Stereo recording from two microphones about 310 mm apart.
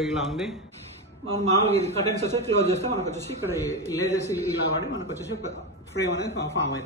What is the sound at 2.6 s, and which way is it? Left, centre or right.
Speech, right.